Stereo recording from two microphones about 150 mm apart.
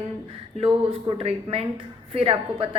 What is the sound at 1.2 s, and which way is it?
A woman's voice, 45° right (ahead or behind).